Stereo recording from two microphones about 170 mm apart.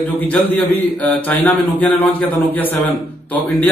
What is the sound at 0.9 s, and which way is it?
A man's voice, 10° left (ahead or behind).